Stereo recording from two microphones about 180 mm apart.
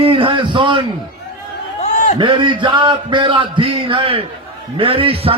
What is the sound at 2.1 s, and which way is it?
A man's voice, 25° right (ahead or behind).